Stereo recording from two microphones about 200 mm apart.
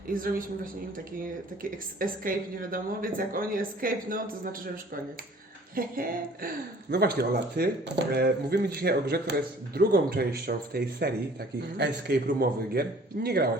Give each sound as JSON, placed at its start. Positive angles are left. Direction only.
{"t": 0.1, "sound": "speech", "side_deg": -45}
{"t": 2.0, "sound": "speech", "side_deg": -45}
{"t": 5.7, "sound": "speech", "side_deg": -45}